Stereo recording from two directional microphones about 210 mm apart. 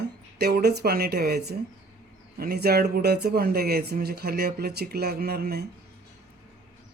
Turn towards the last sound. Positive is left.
turn(degrees=-50)  # may be behind; listen again after turning